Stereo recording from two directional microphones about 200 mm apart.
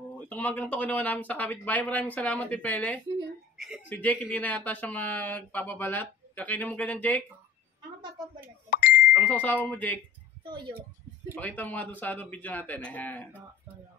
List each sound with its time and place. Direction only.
0.3 s speech: 10° left (ahead or behind)
4.0 s speech: 10° left (ahead or behind)
8.6 s a sound: 45° left (ahead or behind)
9.3 s speech: 10° left (ahead or behind)
10.4 s a woman's voice: 25° right (ahead or behind)
11.3 s speech: 10° left (ahead or behind)